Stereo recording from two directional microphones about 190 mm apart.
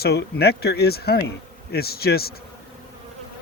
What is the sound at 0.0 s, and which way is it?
Speech, 55° left (ahead or behind).